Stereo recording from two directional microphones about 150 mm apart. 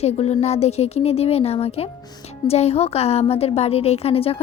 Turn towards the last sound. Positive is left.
turn(degrees=40)  # may be behind; listen again after turning